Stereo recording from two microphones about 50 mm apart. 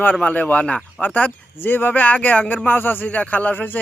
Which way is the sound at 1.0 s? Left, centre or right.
Left.